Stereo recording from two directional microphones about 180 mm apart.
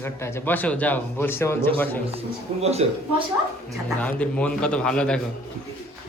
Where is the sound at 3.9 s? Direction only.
5° left (ahead or behind).